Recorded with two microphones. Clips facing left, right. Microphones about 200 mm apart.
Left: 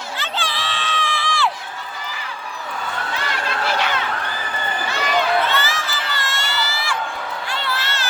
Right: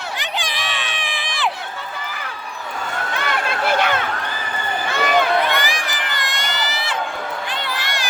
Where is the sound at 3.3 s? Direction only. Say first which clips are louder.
Right 4 dB; 55° right (ahead or behind).